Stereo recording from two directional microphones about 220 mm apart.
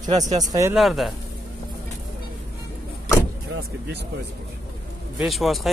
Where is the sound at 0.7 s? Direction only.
Centre (ahead or behind).